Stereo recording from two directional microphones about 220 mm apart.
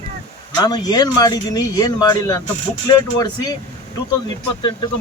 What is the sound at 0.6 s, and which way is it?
Speech, 20° left (ahead or behind).